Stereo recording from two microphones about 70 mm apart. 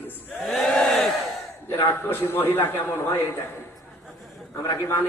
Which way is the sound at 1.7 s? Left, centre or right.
Left.